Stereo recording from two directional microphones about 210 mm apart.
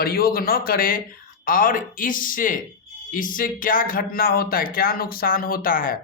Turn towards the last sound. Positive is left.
turn(degrees=40)  # may be behind; listen again after turning